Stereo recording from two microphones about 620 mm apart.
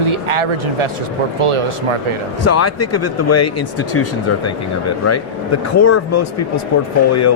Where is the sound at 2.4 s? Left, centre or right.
Left.